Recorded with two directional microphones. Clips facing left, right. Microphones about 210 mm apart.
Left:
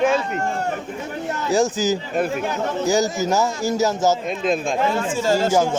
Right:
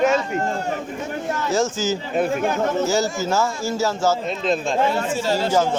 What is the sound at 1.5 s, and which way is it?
Speech, 15° left (ahead or behind).